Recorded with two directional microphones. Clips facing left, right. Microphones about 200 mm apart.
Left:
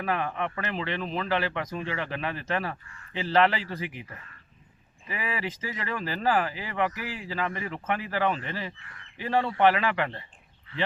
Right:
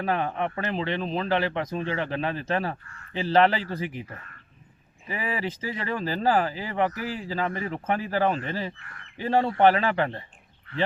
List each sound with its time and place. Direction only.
0.0 s a man's voice: 30° right (ahead or behind)
5.0 s a man's voice: 30° right (ahead or behind)
8.8 s speech: 55° right (ahead or behind)
9.2 s a man's voice: 40° right (ahead or behind)